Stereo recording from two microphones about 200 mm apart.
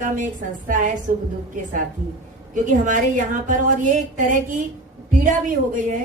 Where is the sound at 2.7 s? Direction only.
40° right (ahead or behind).